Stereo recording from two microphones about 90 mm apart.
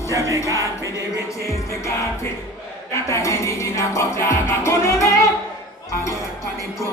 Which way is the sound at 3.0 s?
35° left (ahead or behind).